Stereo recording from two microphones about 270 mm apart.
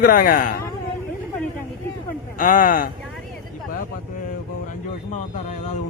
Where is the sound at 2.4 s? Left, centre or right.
Left.